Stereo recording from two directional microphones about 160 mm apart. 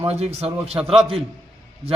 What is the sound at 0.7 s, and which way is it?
Speech, 5° right (ahead or behind).